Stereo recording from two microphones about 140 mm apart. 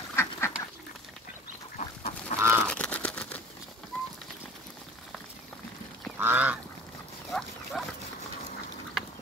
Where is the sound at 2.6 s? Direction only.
10° left (ahead or behind).